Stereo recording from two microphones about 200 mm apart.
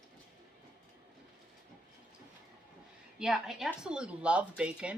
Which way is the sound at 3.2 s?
Centre (ahead or behind).